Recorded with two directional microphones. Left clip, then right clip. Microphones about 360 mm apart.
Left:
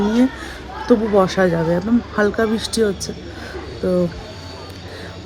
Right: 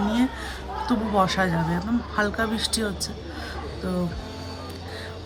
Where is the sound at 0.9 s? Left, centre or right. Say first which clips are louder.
Left 8 dB; centre.